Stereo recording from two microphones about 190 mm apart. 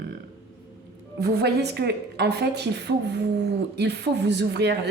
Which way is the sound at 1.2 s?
55° right (ahead or behind).